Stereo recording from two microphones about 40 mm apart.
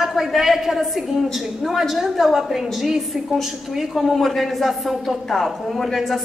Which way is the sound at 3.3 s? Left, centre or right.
Centre.